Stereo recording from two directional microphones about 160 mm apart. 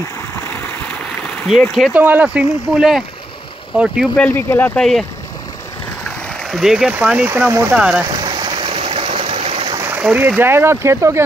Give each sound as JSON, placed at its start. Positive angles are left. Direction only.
{"t": 0.4, "sound": "stream", "side_deg": 15}
{"t": 2.0, "sound": "speech", "side_deg": -10}
{"t": 4.2, "sound": "speech", "side_deg": 15}
{"t": 6.0, "sound": "speech", "side_deg": 0}
{"t": 8.1, "sound": "a sound", "side_deg": -25}
{"t": 9.8, "sound": "speech", "side_deg": -10}